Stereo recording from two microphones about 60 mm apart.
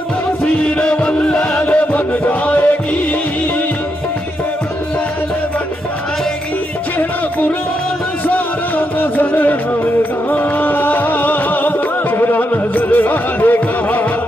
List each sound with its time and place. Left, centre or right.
0.5 s music: left
1.7 s music: left
7.0 s music: left